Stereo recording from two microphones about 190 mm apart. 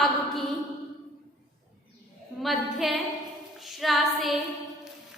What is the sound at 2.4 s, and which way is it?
Female singing, centre (ahead or behind).